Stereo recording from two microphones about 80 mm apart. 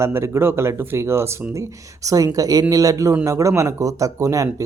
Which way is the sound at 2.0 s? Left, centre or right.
Right.